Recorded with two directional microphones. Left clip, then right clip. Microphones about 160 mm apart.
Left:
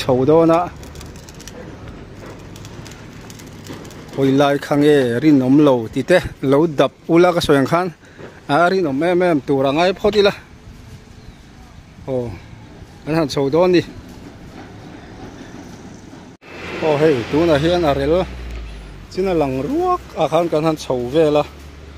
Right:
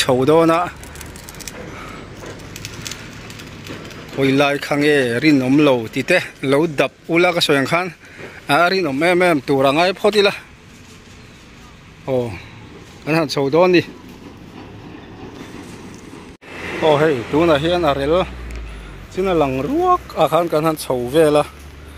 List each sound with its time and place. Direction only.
0.0 s speech: 5° left (ahead or behind)
2.5 s a sound: 70° left (ahead or behind)
4.2 s speech: 30° left (ahead or behind)
8.5 s speech: 20° left (ahead or behind); by 10.4 s 5° left (ahead or behind)
12.1 s speech: 10° left (ahead or behind)
16.5 s a sound: 40° right (ahead or behind)
16.9 s speech: 10° left (ahead or behind)